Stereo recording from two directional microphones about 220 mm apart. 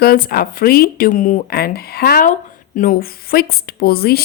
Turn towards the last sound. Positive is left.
turn(degrees=45)  # may be behind; listen again after turning